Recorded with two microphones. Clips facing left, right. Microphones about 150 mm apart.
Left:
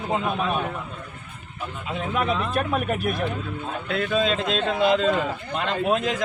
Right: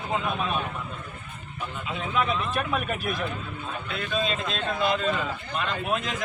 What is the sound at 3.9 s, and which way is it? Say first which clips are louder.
A man's voice: left 6 dB; 80° left.